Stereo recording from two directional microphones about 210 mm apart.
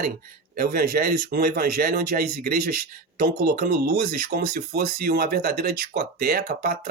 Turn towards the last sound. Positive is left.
turn(degrees=-45)  # may be behind; listen again after turning